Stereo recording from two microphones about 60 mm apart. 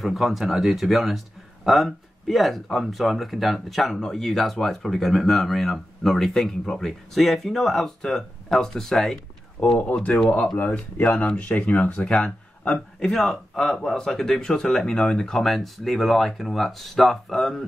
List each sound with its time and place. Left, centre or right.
0.0 s speech: centre
9.6 s speech: centre